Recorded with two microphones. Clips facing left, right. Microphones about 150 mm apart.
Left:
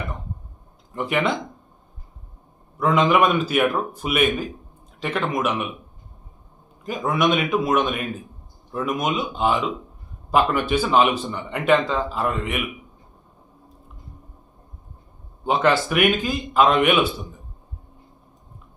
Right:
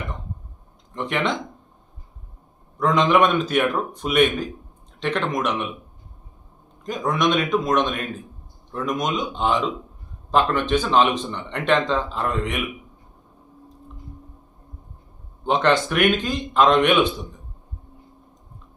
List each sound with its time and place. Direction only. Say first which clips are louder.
0.9 s speech: left 2 dB; 5° left (ahead or behind)
2.7 s a man's voice: even; 5° left (ahead or behind)
6.8 s speech: even; 5° left (ahead or behind)
15.4 s a man's voice: even; 5° left (ahead or behind)